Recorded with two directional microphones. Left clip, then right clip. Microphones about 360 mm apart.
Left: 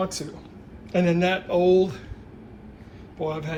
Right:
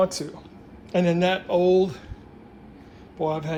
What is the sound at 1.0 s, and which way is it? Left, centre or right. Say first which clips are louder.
Speech: right 1 dB; right.